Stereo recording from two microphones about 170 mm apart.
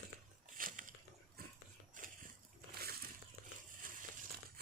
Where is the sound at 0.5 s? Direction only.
50° right (ahead or behind).